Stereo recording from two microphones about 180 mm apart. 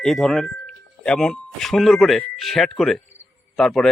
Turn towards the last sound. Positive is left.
turn(degrees=0)  # may be behind; listen again after turning